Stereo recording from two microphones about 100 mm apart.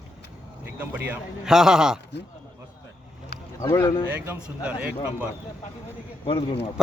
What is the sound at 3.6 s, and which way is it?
Speech, 30° left (ahead or behind).